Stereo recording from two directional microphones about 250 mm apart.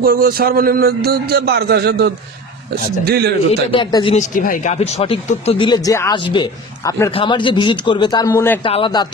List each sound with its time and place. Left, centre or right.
0.0 s a man's voice: right
3.7 s speech: centre